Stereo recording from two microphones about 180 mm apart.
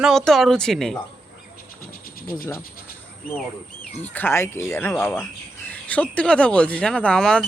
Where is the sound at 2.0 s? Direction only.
55° left (ahead or behind).